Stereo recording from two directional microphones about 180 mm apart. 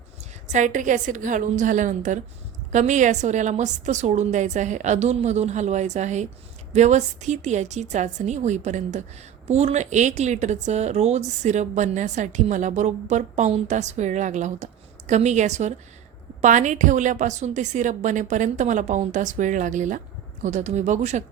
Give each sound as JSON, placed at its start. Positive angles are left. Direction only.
{"t": 0.5, "sound": "a woman's voice", "side_deg": -45}